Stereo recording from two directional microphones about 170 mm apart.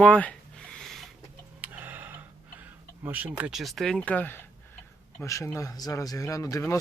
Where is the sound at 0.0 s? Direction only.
5° left (ahead or behind).